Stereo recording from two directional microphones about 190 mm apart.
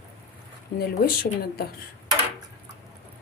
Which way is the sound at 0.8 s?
50° left (ahead or behind).